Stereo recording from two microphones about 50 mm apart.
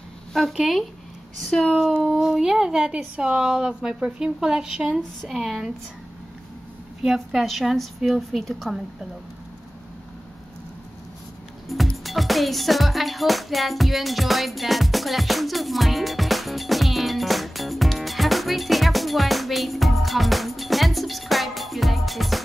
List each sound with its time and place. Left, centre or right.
0.3 s a woman's voice: centre
2.1 s speech: centre
7.0 s a woman's voice: centre
12.0 s music: centre